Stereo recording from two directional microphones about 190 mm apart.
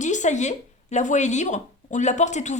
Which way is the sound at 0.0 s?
40° left (ahead or behind).